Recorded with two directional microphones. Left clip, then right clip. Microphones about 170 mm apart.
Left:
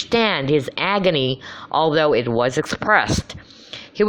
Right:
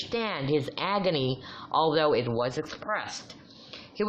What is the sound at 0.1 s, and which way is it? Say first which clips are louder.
Speech: left 11 dB; 35° left (ahead or behind).